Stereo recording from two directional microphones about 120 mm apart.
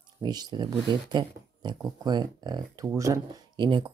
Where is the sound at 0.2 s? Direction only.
35° right (ahead or behind).